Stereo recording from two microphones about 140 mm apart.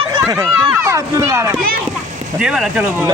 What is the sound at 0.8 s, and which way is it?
Speech, 20° right (ahead or behind).